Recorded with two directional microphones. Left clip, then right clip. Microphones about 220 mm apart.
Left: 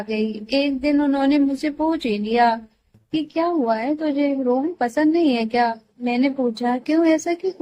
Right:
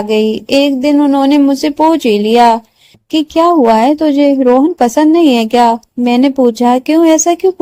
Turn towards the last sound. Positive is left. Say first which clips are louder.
# right 10 dB
turn(degrees=-35)  # may be behind; listen again after turning